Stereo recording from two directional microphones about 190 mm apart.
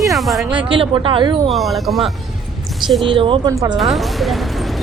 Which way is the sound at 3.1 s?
25° right (ahead or behind).